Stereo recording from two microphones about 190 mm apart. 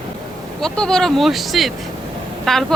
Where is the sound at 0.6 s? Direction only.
5° left (ahead or behind).